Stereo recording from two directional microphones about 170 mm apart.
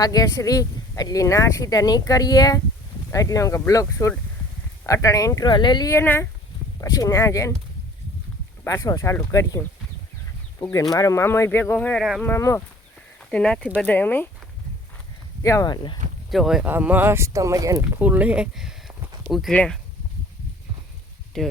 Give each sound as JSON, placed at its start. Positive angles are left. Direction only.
{"t": 0.0, "sound": "speech", "side_deg": 20}
{"t": 8.6, "sound": "speech", "side_deg": 15}
{"t": 10.6, "sound": "speech", "side_deg": 20}
{"t": 13.3, "sound": "speech", "side_deg": 5}
{"t": 15.4, "sound": "speech", "side_deg": 20}
{"t": 16.3, "sound": "speech", "side_deg": 0}
{"t": 21.3, "sound": "speech", "side_deg": 5}